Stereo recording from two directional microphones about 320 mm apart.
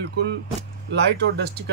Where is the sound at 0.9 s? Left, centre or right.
Right.